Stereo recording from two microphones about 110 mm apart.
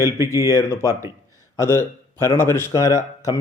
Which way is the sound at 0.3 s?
30° left (ahead or behind).